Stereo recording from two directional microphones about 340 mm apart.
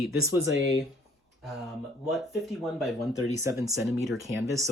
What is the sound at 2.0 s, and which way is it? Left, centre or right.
Speech, centre.